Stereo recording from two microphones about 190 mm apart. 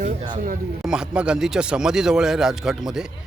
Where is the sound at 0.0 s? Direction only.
25° right (ahead or behind).